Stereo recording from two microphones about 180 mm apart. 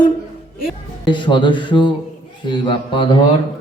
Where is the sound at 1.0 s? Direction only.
25° left (ahead or behind).